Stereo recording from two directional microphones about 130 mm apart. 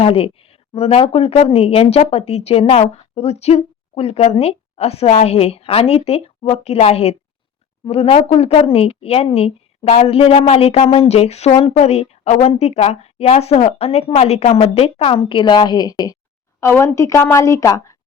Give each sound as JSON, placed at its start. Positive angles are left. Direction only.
{"t": 0.0, "sound": "a woman's voice", "side_deg": 45}